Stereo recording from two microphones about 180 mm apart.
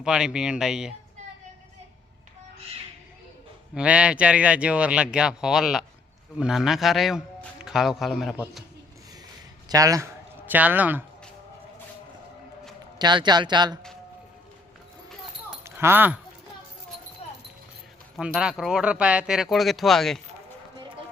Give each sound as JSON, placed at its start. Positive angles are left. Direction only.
{"t": 0.0, "sound": "speech", "side_deg": -5}
{"t": 3.8, "sound": "speech", "side_deg": -5}
{"t": 9.6, "sound": "speech", "side_deg": -20}
{"t": 13.0, "sound": "speech", "side_deg": -25}
{"t": 15.6, "sound": "speech", "side_deg": -15}
{"t": 18.2, "sound": "speech", "side_deg": -5}